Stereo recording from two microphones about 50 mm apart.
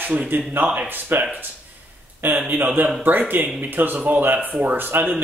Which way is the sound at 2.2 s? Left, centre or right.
Right.